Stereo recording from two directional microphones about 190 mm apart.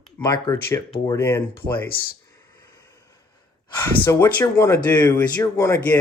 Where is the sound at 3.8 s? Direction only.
15° left (ahead or behind).